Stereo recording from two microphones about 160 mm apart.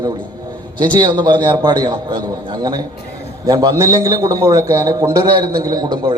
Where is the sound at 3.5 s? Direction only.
20° right (ahead or behind).